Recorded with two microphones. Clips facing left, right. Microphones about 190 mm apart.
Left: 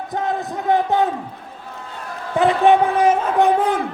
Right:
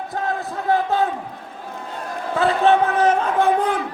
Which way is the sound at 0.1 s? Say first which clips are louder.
Left 3 dB; 20° left (ahead or behind).